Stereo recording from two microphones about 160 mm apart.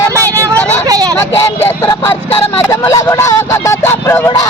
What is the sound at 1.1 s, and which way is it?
Speech, 15° left (ahead or behind).